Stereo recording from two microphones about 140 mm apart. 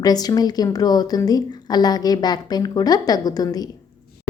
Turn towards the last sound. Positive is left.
turn(degrees=25)  # may be behind; listen again after turning